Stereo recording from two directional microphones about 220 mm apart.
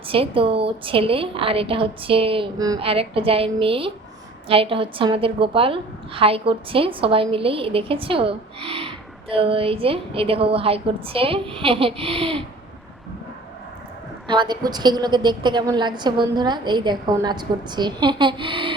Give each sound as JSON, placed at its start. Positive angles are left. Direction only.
{"t": 0.1, "sound": "a woman's voice", "side_deg": -25}
{"t": 14.3, "sound": "a woman's voice", "side_deg": -20}